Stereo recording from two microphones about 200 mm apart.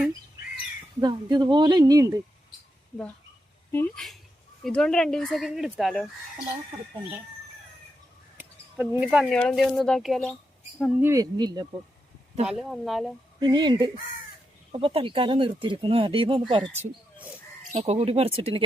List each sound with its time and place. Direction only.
1.0 s speech: 20° right (ahead or behind)
3.7 s speech: 10° left (ahead or behind)
8.4 s a sound: 5° right (ahead or behind)
9.3 s speech: 5° left (ahead or behind)
11.0 s speech: 15° right (ahead or behind)
12.5 s speech: centre (ahead or behind)
13.4 s speech: 20° right (ahead or behind)